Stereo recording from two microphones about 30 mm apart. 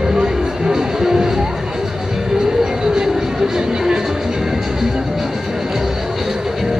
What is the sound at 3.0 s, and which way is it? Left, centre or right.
Music, centre.